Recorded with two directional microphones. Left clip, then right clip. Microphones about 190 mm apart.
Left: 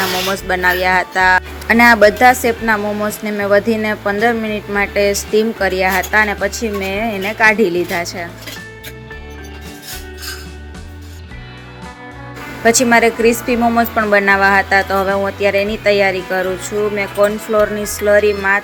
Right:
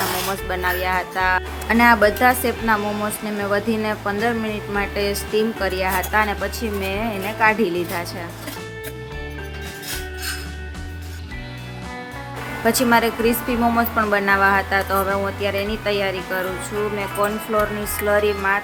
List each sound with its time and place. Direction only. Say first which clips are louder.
0.3 s speech: left 8 dB; 30° left (ahead or behind)
12.6 s speech: left 6 dB; 20° left (ahead or behind)